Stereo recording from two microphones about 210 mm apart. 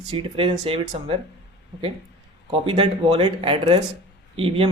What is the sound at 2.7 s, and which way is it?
Speech, 25° right (ahead or behind).